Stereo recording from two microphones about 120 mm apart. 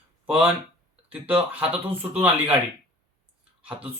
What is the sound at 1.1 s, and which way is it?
Speech, 10° right (ahead or behind).